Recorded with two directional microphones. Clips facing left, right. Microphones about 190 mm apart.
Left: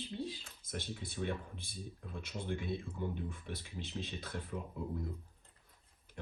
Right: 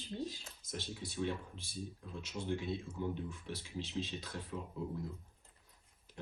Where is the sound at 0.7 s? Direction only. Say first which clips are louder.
Left 1 dB; 55° left (ahead or behind).